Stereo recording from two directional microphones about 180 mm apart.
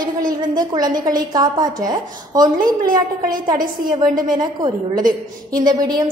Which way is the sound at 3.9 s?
20° right (ahead or behind).